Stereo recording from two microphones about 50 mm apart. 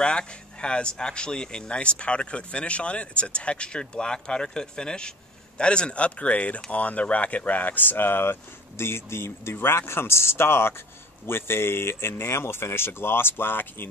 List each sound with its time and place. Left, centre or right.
0.0 s speech: centre; by 13.8 s left